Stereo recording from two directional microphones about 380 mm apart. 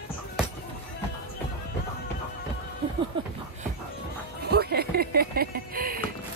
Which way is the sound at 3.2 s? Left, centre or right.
Centre.